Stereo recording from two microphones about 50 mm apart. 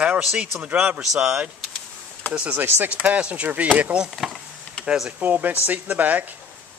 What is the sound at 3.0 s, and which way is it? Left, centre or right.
Speech, right.